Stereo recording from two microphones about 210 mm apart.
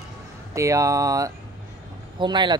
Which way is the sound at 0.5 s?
15° right (ahead or behind).